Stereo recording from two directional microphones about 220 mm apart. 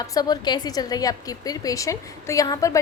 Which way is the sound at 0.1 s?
15° left (ahead or behind).